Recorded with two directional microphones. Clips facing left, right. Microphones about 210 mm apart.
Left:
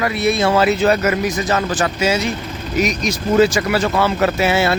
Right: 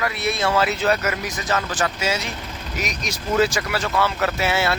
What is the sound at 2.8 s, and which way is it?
Speech, 5° right (ahead or behind).